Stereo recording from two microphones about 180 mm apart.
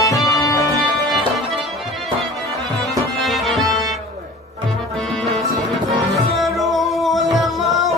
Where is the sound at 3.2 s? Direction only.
Centre (ahead or behind).